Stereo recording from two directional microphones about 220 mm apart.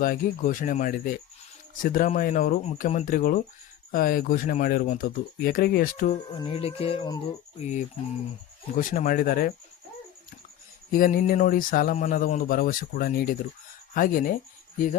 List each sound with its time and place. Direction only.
0.0 s speech: 40° left (ahead or behind)
6.4 s speech: 25° left (ahead or behind)
8.7 s speech: 35° left (ahead or behind)
10.9 s speech: 40° left (ahead or behind)